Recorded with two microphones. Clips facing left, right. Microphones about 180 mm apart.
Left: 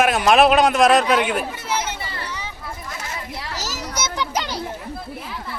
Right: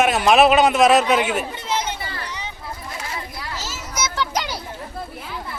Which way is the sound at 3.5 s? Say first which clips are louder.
Left 2 dB; 40° left (ahead or behind).